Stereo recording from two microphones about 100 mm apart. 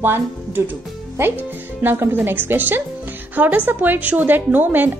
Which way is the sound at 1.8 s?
20° right (ahead or behind).